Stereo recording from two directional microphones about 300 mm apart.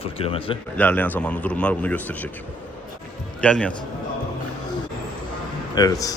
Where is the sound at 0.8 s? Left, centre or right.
Centre.